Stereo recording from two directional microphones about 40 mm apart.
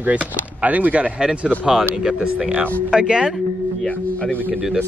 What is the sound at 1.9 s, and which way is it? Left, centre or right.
Speech, centre.